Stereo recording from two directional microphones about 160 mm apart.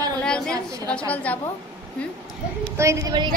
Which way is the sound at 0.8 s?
10° left (ahead or behind).